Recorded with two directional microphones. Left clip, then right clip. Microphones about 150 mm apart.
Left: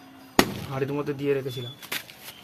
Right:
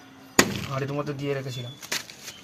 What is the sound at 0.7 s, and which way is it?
Speech, 15° left (ahead or behind).